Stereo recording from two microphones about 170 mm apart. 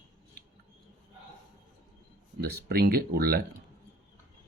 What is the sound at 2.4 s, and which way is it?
Speech, 65° right (ahead or behind).